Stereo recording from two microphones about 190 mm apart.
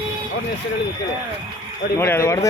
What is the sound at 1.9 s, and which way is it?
Speech, 15° left (ahead or behind).